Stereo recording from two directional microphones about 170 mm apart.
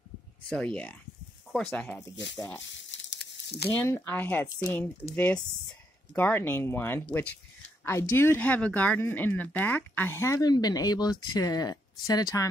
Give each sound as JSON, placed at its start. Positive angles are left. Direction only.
{"t": 0.5, "sound": "speech", "side_deg": 5}
{"t": 2.3, "sound": "speech", "side_deg": 20}
{"t": 2.6, "sound": "crumpling", "side_deg": 90}
{"t": 3.7, "sound": "speech", "side_deg": 10}